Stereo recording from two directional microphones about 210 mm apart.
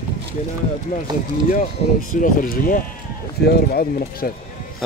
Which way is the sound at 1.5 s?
40° left (ahead or behind).